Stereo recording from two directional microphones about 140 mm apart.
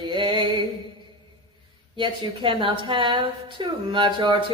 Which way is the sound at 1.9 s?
35° right (ahead or behind).